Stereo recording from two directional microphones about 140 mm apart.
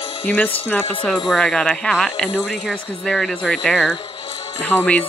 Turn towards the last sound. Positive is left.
turn(degrees=15)  # may be behind; listen again after turning